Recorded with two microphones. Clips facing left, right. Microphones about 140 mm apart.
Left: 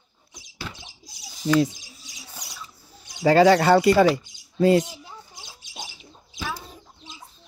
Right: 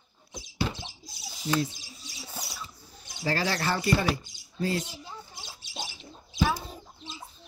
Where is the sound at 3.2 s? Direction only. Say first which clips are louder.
Left 14 dB; 85° left.